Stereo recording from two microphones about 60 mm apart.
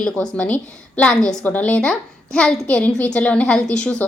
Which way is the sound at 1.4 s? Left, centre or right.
Left.